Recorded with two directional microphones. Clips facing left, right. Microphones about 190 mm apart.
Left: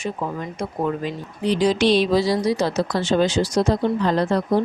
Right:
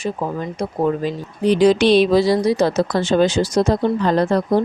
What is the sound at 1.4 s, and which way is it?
Speech, 60° right (ahead or behind).